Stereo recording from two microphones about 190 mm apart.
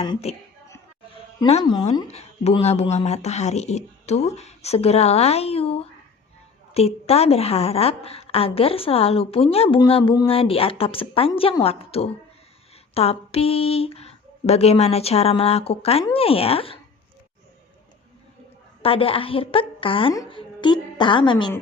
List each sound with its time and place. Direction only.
0.0 s a woman's voice: 30° left (ahead or behind)
1.5 s a woman's voice: 30° left (ahead or behind)
18.8 s a woman's voice: 30° left (ahead or behind)